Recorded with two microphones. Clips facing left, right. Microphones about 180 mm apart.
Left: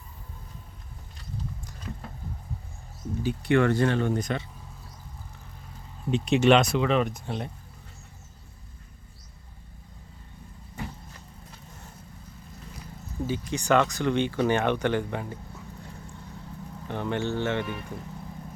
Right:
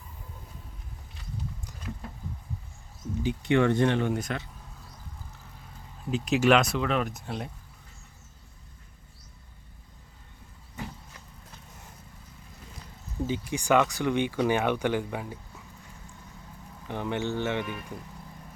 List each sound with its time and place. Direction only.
3.2 s speech: 15° right (ahead or behind)
4.2 s speech: centre (ahead or behind)
6.1 s speech: 5° right (ahead or behind)
13.2 s speech: 15° right (ahead or behind)
16.9 s speech: 15° right (ahead or behind)